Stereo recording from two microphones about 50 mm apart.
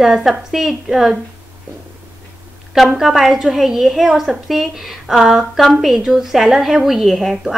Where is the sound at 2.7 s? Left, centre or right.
Centre.